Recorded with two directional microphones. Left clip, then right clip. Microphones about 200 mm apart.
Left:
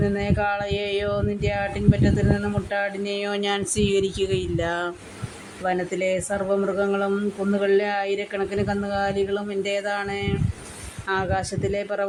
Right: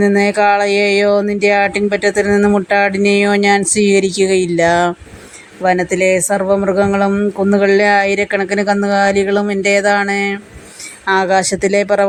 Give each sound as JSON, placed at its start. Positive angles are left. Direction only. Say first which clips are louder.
{"t": 0.0, "sound": "music", "louder": "right 12 dB", "side_deg": -40}
{"t": 5.6, "sound": "speech", "louder": "right 11 dB", "side_deg": -45}
{"t": 11.0, "sound": "music", "louder": "right 12 dB", "side_deg": -40}